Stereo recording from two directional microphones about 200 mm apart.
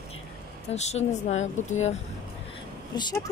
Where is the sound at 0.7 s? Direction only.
35° left (ahead or behind).